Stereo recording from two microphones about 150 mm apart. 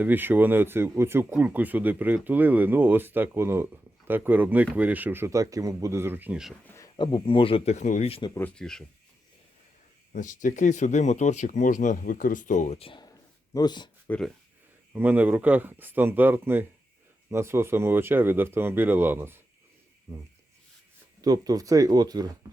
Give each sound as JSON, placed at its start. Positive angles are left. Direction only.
{"t": 0.0, "sound": "speech", "side_deg": -10}
{"t": 6.7, "sound": "a sound", "side_deg": 20}
{"t": 6.9, "sound": "speech", "side_deg": 30}
{"t": 8.4, "sound": "speech", "side_deg": 5}
{"t": 10.1, "sound": "speech", "side_deg": 60}
{"t": 13.5, "sound": "speech", "side_deg": 30}
{"t": 14.9, "sound": "speech", "side_deg": -10}
{"t": 21.2, "sound": "speech", "side_deg": -25}